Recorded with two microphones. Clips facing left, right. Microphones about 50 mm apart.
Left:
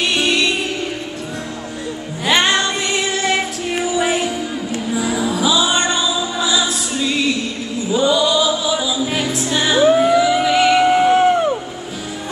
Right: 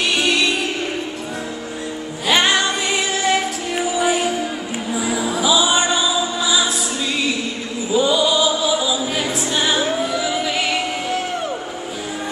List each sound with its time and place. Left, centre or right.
2.2 s music: centre
7.9 s chant: centre
9.0 s music: centre
9.8 s a sound: left
10.1 s vehicle: centre
10.9 s crowd: left